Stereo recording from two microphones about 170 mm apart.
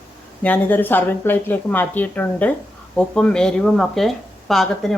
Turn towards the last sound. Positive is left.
turn(degrees=0)  # may be behind; listen again after turning